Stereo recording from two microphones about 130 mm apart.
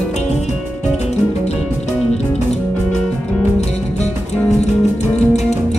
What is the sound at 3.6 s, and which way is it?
Music, 60° left (ahead or behind).